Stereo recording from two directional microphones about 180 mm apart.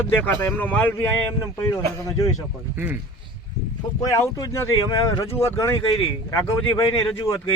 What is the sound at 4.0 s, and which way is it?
Speech, 20° left (ahead or behind).